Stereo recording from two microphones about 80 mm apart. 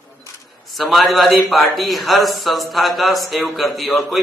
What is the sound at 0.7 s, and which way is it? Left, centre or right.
A man's voice, centre.